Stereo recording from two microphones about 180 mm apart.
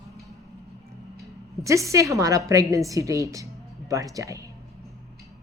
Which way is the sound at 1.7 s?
15° right (ahead or behind).